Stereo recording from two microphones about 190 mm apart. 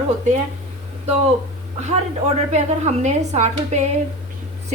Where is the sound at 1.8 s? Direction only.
35° right (ahead or behind).